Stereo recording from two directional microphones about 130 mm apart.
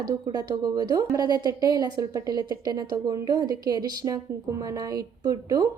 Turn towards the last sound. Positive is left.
turn(degrees=-30)  # may be behind; listen again after turning